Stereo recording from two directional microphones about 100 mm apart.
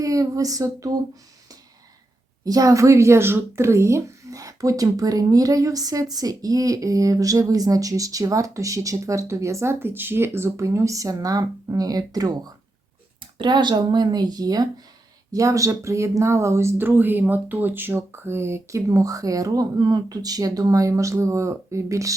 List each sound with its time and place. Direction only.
0.0 s speech: 35° right (ahead or behind)
2.4 s speech: 35° right (ahead or behind)
13.4 s speech: 50° right (ahead or behind); by 22.1 s 30° right (ahead or behind)